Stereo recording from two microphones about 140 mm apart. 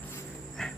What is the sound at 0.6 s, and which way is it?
Dog, 5° left (ahead or behind).